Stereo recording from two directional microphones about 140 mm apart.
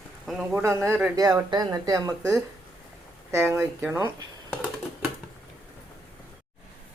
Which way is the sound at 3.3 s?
20° right (ahead or behind).